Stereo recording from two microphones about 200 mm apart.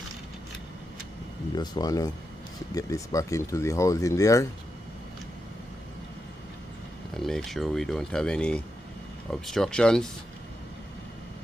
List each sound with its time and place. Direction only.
1.5 s speech: 20° left (ahead or behind)
7.2 s speech: centre (ahead or behind)